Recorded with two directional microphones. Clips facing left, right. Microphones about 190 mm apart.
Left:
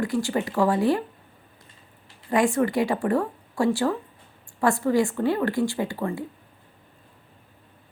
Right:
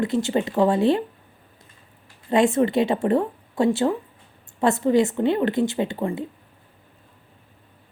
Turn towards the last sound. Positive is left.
turn(degrees=-20)  # may be behind; listen again after turning